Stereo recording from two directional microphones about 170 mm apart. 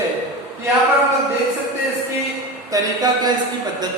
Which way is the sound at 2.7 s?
25° right (ahead or behind).